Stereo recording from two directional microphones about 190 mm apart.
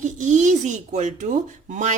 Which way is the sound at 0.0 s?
40° right (ahead or behind).